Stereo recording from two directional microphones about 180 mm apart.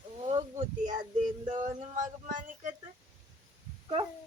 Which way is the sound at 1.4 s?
40° right (ahead or behind).